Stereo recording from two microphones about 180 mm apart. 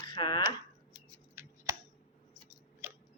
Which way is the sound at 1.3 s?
15° right (ahead or behind).